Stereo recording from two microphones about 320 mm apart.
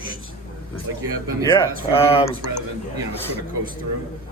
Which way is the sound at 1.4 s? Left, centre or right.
Centre.